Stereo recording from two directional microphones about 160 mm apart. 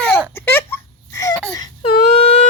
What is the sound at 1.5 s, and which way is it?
Wail, 25° left (ahead or behind).